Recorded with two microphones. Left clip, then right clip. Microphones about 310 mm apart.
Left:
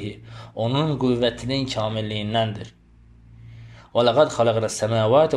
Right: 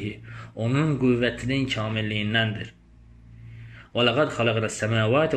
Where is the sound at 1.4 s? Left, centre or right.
Left.